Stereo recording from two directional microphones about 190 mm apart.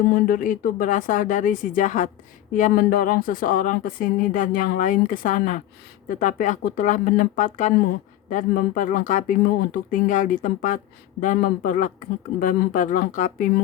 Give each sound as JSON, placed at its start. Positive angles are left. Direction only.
{"t": 0.1, "sound": "a woman's voice", "side_deg": 50}